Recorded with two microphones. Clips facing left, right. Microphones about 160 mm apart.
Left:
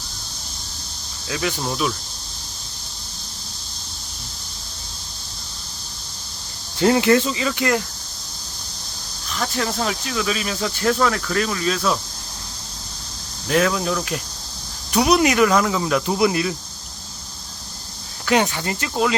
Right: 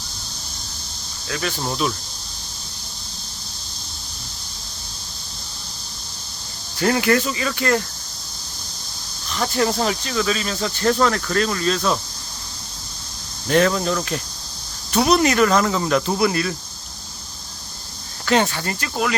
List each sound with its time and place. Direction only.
1.3 s speech: 15° left (ahead or behind)
1.6 s speech: 5° left (ahead or behind)
6.7 s speech: 20° left (ahead or behind)
9.3 s speech: centre (ahead or behind)
13.5 s speech: 5° left (ahead or behind)
16.1 s speech: 15° left (ahead or behind)
18.3 s speech: 10° left (ahead or behind)